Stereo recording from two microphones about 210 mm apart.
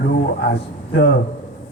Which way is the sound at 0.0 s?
55° left (ahead or behind).